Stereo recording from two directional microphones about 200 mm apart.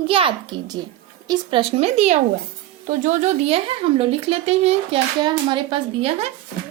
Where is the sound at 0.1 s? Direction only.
25° right (ahead or behind).